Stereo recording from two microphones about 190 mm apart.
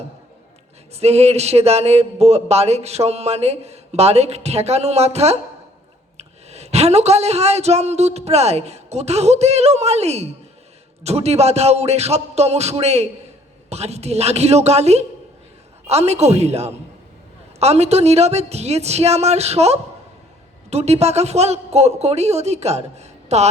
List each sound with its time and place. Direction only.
0.9 s speech: 35° right (ahead or behind)